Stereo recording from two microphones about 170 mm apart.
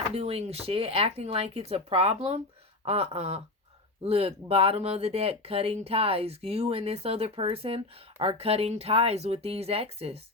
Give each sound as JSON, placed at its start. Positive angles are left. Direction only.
{"t": 0.1, "sound": "speech", "side_deg": -35}